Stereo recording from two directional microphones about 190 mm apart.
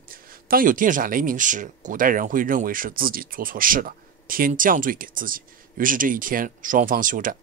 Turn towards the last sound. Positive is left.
turn(degrees=-45)  # may be behind; listen again after turning